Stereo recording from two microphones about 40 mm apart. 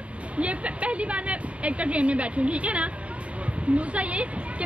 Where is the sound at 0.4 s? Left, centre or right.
Right.